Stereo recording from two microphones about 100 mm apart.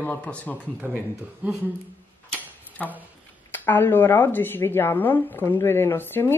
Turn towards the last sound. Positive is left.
turn(degrees=20)  # may be behind; listen again after turning